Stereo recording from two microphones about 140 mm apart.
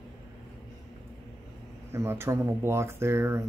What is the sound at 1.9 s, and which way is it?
Speech, 20° right (ahead or behind).